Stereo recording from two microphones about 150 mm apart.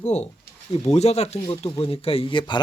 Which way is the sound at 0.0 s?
50° left (ahead or behind).